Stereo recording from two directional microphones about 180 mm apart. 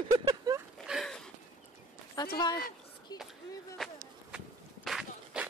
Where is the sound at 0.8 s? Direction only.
Centre (ahead or behind).